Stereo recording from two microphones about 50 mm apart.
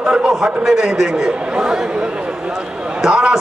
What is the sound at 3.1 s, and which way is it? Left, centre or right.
Speech, centre.